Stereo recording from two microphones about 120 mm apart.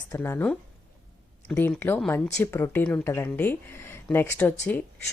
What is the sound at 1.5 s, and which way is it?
Speech, 20° left (ahead or behind).